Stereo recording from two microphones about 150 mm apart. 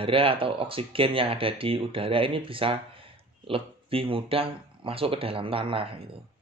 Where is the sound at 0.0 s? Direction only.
35° right (ahead or behind).